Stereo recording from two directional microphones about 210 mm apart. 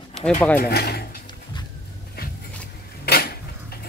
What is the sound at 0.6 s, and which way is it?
Speech, 50° left (ahead or behind).